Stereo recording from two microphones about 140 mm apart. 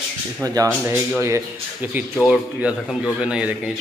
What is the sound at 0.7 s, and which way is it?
Speech, 15° right (ahead or behind).